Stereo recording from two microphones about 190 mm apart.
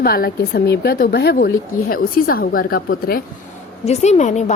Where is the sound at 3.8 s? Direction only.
35° left (ahead or behind).